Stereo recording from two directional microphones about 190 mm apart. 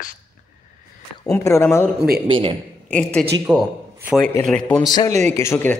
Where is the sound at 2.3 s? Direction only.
25° right (ahead or behind).